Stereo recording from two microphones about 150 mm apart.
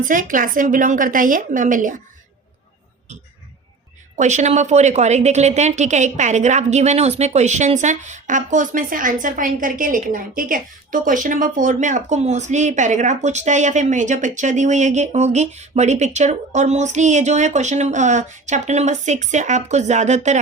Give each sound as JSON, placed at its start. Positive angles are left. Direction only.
{"t": 0.0, "sound": "a woman's voice", "side_deg": -65}
{"t": 4.2, "sound": "a woman's voice", "side_deg": -50}